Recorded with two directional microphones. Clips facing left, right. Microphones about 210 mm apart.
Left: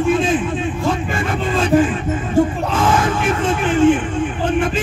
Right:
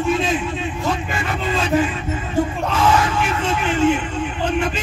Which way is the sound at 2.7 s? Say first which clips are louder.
Left 1 dB; 50° left (ahead or behind).